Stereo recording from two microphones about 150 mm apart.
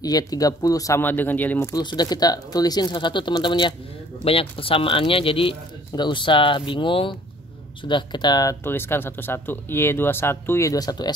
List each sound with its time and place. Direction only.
0.0 s speech: 25° left (ahead or behind)
1.7 s speech: 30° left (ahead or behind)
8.6 s speech: 15° left (ahead or behind)